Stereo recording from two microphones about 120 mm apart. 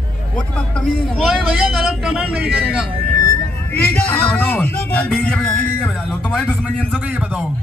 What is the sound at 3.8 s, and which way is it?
Speech, 15° left (ahead or behind).